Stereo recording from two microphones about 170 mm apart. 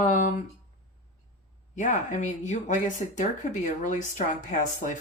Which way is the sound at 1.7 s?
50° left (ahead or behind).